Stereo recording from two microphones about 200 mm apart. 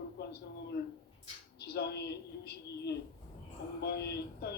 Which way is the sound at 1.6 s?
55° left (ahead or behind).